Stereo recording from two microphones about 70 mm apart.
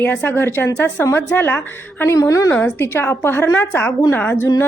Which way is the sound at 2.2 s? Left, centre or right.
Left.